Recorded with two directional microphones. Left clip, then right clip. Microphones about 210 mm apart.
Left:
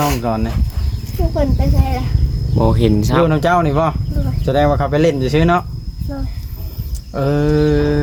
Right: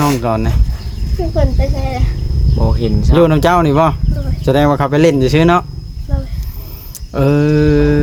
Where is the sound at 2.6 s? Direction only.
50° left (ahead or behind).